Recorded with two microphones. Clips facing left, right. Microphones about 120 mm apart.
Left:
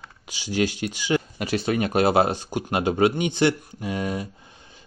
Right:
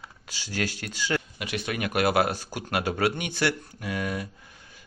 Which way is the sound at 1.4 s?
35° left (ahead or behind).